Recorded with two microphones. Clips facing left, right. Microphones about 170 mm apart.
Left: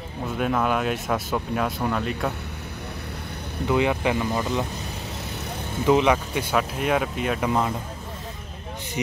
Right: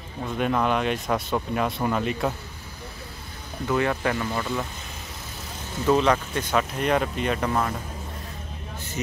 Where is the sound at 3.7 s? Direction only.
15° left (ahead or behind).